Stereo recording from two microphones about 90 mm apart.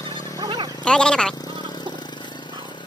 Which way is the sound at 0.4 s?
50° right (ahead or behind).